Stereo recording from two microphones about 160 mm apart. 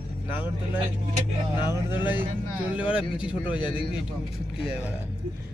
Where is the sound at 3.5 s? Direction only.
30° left (ahead or behind).